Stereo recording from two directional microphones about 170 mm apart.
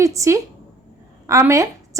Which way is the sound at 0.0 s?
20° right (ahead or behind).